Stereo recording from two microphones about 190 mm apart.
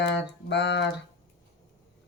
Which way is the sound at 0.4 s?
65° left (ahead or behind).